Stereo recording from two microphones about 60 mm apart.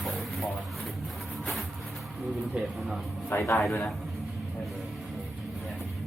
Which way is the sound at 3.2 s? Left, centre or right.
Left.